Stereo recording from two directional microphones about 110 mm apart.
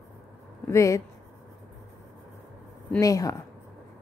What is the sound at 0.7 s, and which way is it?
Speech, 30° left (ahead or behind).